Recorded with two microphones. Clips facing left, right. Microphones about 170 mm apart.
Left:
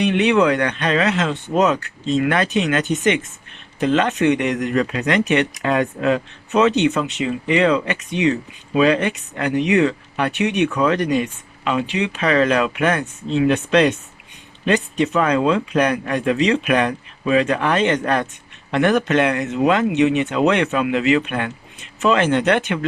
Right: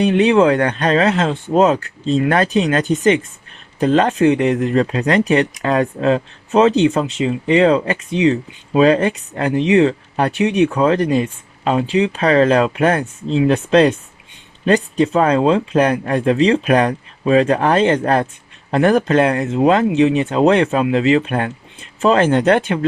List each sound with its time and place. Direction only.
0.0 s speech: 35° right (ahead or behind)